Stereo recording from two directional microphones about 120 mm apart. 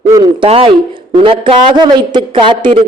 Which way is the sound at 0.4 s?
50° right (ahead or behind).